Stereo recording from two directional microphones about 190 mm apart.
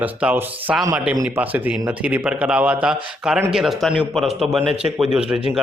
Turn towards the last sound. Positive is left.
turn(degrees=0)  # may be behind; listen again after turning